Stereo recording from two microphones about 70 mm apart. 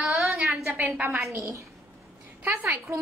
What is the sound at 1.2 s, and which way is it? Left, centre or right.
A woman's voice, right.